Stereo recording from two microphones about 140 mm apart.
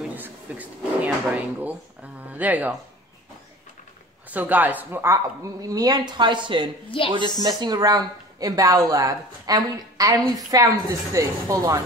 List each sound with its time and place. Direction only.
0.1 s speech: 10° right (ahead or behind)
4.3 s a woman's voice: 10° right (ahead or behind)